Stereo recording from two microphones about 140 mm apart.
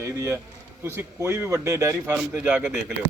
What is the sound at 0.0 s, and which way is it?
A man's voice, 20° right (ahead or behind).